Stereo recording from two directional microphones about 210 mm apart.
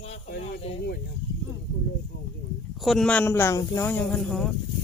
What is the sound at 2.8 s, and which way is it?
Speech, centre (ahead or behind).